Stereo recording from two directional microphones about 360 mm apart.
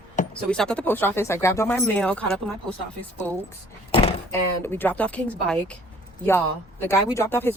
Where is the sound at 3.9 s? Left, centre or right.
Centre.